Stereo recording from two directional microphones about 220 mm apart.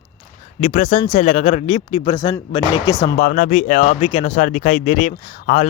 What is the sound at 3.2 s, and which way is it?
Speech, 35° left (ahead or behind).